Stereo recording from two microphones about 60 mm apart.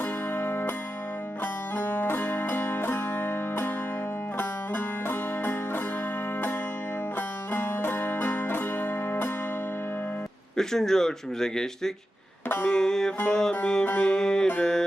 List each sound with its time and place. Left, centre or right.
0.0 s music: left
1.7 s music: left
7.2 s music: left
10.6 s speech: centre